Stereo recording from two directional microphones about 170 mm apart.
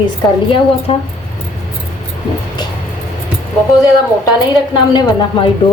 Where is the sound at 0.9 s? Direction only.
35° left (ahead or behind).